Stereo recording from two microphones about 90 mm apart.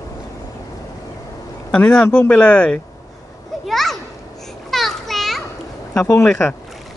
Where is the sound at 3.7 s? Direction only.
Centre (ahead or behind).